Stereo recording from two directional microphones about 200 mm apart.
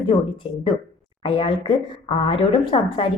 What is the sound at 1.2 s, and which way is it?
A woman's voice, 25° left (ahead or behind).